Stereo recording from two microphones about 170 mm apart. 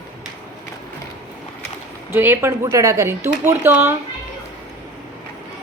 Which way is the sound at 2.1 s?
15° right (ahead or behind).